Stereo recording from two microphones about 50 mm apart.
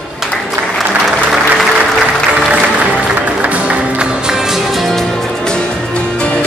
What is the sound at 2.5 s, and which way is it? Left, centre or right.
Music, right.